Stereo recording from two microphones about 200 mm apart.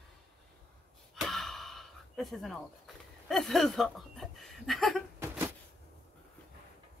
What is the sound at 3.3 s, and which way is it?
Speech, centre (ahead or behind).